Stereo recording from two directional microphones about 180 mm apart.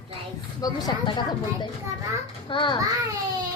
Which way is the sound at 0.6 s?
20° left (ahead or behind).